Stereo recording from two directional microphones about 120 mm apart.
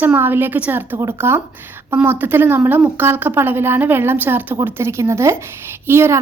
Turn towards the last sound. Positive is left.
turn(degrees=-20)  # may be behind; listen again after turning